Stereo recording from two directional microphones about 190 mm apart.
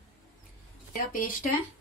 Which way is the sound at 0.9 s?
45° left (ahead or behind).